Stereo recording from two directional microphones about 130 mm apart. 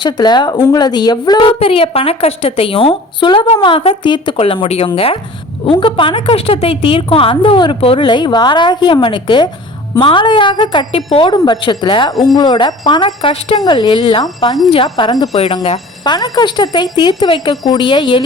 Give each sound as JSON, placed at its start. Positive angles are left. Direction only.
{"t": 0.0, "sound": "a woman's voice", "side_deg": 35}
{"t": 1.5, "sound": "a woman's voice", "side_deg": 45}